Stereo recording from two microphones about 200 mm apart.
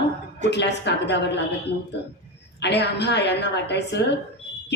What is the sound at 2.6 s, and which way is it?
A woman's voice, 60° left (ahead or behind).